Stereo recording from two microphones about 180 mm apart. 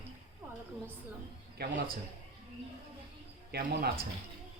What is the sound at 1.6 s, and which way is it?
Speech, 65° right (ahead or behind).